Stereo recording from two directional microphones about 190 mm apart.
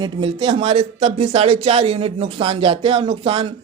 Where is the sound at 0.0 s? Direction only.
25° right (ahead or behind).